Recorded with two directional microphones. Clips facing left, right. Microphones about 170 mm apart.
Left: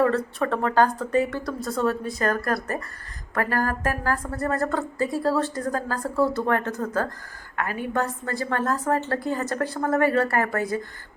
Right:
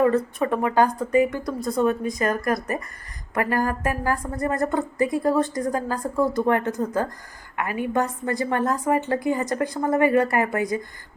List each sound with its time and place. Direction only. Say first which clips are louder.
0.0 s a woman's voice: right 2 dB; 10° right (ahead or behind)